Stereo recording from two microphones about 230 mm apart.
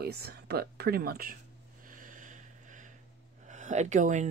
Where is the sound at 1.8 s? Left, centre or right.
Right.